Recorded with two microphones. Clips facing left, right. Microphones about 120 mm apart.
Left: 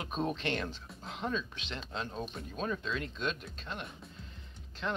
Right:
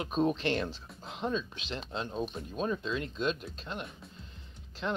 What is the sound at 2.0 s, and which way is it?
Speech, 5° right (ahead or behind).